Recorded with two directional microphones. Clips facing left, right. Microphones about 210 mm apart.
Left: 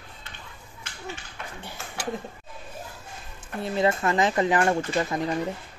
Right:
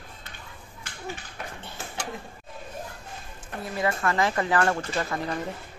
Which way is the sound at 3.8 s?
20° left (ahead or behind).